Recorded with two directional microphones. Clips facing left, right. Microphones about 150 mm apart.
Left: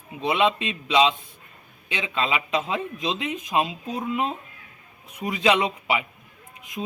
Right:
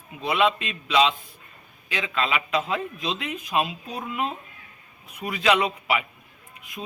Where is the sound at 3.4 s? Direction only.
25° left (ahead or behind).